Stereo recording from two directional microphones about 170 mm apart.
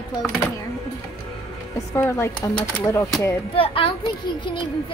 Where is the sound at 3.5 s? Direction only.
30° left (ahead or behind).